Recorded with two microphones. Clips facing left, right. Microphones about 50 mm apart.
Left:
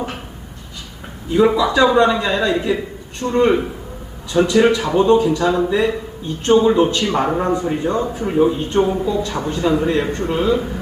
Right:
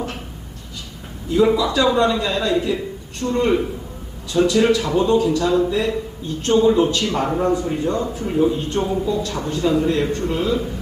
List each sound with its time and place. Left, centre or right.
1.3 s a man's voice: left